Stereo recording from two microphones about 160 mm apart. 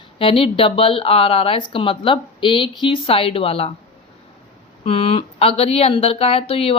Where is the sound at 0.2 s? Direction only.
35° left (ahead or behind).